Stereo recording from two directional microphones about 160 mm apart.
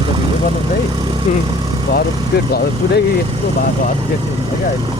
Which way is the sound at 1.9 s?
80° left.